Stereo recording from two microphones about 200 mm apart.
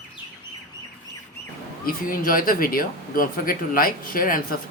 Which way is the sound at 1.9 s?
45° left (ahead or behind).